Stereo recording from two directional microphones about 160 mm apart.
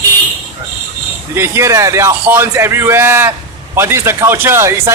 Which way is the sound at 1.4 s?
15° right (ahead or behind).